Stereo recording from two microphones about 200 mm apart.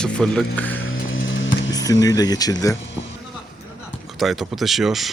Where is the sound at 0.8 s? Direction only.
85° left.